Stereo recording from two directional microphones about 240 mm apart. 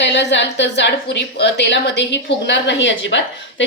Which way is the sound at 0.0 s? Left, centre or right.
Left.